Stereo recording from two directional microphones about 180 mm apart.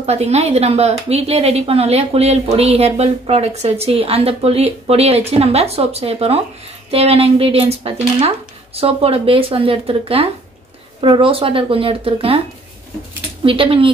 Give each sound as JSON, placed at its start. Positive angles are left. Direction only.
{"t": 0.0, "sound": "a woman's voice", "side_deg": -35}
{"t": 13.4, "sound": "speech", "side_deg": -30}